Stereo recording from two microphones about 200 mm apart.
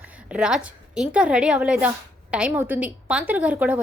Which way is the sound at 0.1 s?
5° right (ahead or behind).